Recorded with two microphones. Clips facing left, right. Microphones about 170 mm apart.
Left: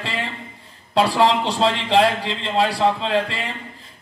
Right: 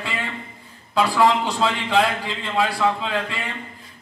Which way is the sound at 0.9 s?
30° left (ahead or behind).